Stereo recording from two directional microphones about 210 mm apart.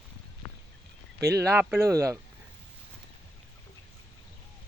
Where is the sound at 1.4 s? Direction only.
10° right (ahead or behind).